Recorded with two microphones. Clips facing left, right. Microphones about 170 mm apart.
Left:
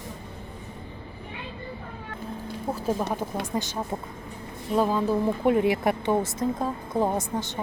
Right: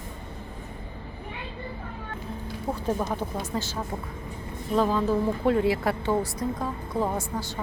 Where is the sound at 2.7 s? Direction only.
5° left (ahead or behind).